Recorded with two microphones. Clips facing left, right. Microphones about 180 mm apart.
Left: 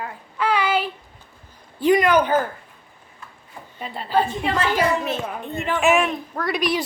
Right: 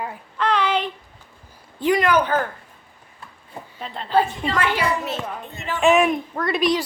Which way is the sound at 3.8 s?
5° left (ahead or behind).